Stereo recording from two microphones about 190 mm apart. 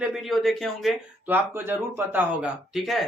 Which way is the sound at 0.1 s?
Centre (ahead or behind).